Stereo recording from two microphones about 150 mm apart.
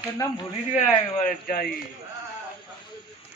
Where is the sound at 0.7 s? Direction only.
75° left (ahead or behind).